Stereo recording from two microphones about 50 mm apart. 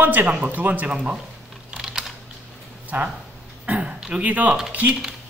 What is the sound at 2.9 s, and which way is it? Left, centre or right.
Speech, right.